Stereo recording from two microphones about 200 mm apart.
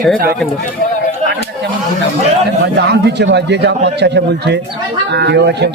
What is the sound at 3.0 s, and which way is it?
A man's voice, 55° right (ahead or behind).